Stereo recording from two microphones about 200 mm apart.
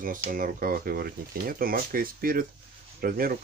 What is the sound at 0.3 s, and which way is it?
Speech, 45° right (ahead or behind).